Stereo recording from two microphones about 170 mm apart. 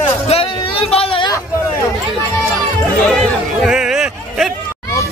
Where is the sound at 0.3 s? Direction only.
35° left (ahead or behind).